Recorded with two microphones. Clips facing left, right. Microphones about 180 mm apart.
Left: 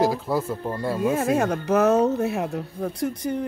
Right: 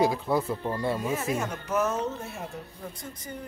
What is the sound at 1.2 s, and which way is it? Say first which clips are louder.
Speech: left 8 dB; 70° left (ahead or behind).